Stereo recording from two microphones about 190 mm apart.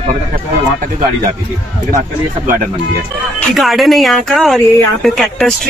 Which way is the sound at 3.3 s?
Centre (ahead or behind).